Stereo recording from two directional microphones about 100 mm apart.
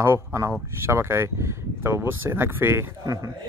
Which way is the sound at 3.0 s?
35° right (ahead or behind).